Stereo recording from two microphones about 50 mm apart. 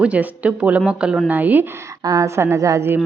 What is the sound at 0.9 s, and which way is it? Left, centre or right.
Speech, centre.